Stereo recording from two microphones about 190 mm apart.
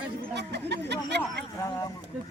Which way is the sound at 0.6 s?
65° right (ahead or behind).